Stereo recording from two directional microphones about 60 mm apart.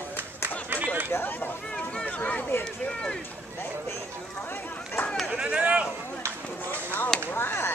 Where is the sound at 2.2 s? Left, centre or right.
Left.